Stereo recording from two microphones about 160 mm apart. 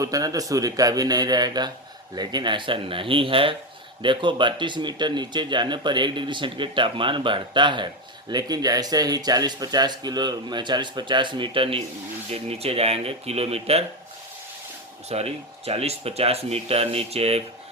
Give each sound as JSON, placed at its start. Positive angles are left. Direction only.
{"t": 0.0, "sound": "speech", "side_deg": -20}
{"t": 15.1, "sound": "speech", "side_deg": -40}